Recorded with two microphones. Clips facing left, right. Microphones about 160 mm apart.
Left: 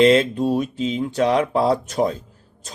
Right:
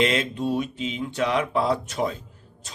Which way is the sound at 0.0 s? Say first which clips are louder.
Left 8 dB; 35° left (ahead or behind).